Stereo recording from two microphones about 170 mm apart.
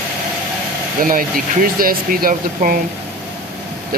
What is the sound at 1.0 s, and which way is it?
Speech, 55° right (ahead or behind).